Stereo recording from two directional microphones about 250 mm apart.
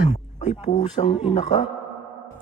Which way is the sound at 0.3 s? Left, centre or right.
Left.